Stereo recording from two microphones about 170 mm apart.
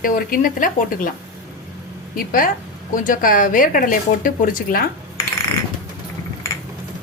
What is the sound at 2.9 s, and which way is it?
A woman's voice, 50° left (ahead or behind).